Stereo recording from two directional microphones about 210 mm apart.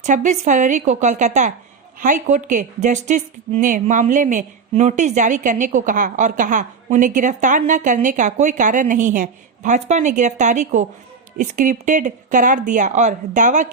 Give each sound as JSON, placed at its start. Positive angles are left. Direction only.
{"t": 0.0, "sound": "a woman's voice", "side_deg": -35}